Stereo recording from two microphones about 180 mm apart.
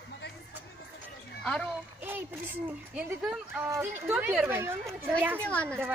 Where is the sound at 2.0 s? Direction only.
10° right (ahead or behind).